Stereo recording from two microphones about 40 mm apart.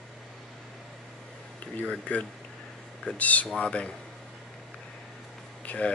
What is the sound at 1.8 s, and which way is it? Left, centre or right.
Speech, left.